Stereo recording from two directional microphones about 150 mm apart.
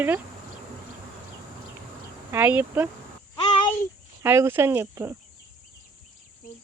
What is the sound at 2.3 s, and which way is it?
Speech, 15° right (ahead or behind).